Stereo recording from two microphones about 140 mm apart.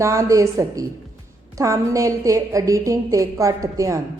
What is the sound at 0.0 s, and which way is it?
A woman's voice, 20° right (ahead or behind).